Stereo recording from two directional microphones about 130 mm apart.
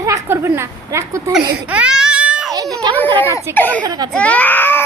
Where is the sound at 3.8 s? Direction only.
30° right (ahead or behind).